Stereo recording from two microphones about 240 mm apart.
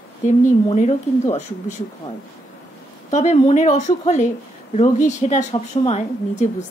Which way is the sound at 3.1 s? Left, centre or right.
Left.